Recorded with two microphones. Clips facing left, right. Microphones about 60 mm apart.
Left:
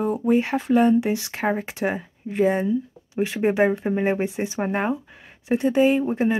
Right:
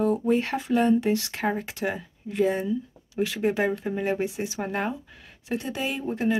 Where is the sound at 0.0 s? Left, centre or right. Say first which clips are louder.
Left 2 dB; centre.